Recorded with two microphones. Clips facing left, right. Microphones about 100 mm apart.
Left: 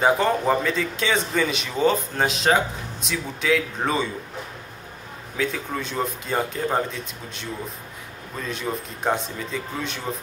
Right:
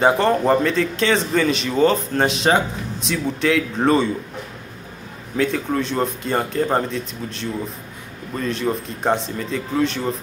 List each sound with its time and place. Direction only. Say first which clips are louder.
0.0 s speech: right 3 dB; 5° left (ahead or behind)
5.4 s speech: right 6 dB; 5° left (ahead or behind)
8.4 s speech: right 6 dB; 5° left (ahead or behind)